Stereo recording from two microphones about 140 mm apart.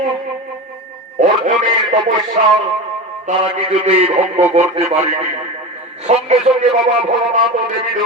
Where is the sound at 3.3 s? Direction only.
65° right (ahead or behind).